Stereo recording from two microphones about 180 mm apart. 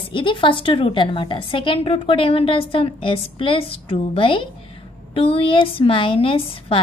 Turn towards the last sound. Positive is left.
turn(degrees=30)  # may be behind; listen again after turning